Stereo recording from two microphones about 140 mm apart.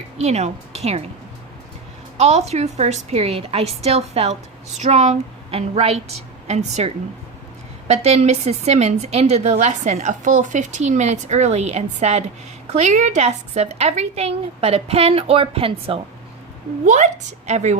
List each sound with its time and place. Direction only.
0.2 s a woman's voice: 50° right (ahead or behind)
2.1 s a woman's voice: 50° right (ahead or behind)
16.8 s a woman's voice: 60° right (ahead or behind)